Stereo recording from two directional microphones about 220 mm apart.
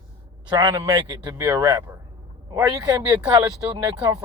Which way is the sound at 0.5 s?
15° right (ahead or behind).